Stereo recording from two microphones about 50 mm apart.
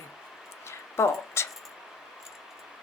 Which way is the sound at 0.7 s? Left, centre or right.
Left.